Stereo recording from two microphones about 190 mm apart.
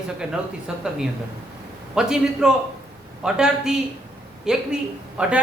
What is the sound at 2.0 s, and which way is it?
A woman's voice, 5° right (ahead or behind).